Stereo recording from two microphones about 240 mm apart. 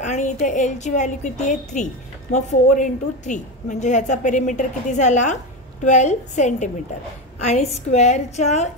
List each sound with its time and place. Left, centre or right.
0.0 s a woman's voice: left